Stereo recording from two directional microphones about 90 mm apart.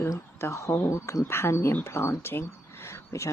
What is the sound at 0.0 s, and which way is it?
Speech, 30° left (ahead or behind).